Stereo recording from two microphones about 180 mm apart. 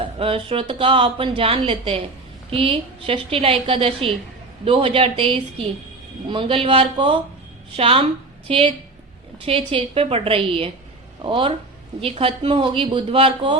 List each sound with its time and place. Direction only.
0.2 s a woman's voice: 30° right (ahead or behind)